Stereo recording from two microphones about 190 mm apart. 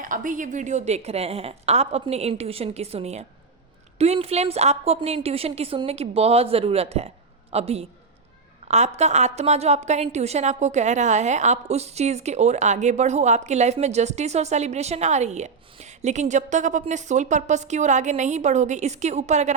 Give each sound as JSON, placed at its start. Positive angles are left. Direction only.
{"t": 0.0, "sound": "a woman's voice", "side_deg": -45}